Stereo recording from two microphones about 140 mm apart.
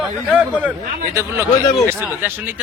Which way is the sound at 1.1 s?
20° right (ahead or behind).